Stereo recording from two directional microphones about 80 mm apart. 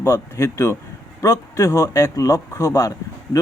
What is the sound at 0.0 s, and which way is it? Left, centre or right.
A man's voice, left.